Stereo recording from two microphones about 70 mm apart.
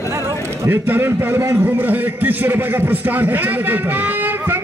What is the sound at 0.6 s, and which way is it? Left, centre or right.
A man's voice, right.